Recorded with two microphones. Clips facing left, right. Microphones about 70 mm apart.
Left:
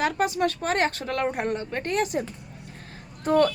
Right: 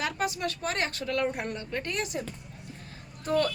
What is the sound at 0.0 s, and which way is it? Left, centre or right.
Speech, left.